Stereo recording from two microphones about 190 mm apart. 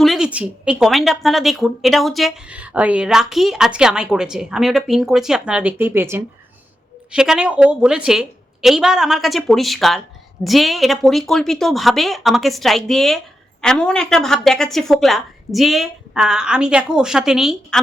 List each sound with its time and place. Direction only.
0.0 s speech: centre (ahead or behind)